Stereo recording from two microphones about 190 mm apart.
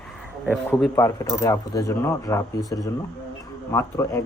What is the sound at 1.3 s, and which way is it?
Speech, 20° left (ahead or behind).